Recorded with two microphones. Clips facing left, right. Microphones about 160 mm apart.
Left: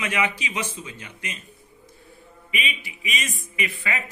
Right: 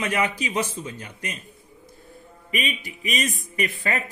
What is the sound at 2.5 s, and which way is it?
Speech, 45° right (ahead or behind).